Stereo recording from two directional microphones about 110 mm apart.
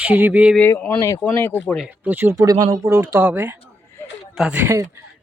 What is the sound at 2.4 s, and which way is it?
Speech, 35° right (ahead or behind).